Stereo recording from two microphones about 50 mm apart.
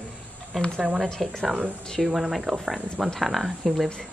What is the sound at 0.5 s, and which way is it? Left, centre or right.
Speech, centre.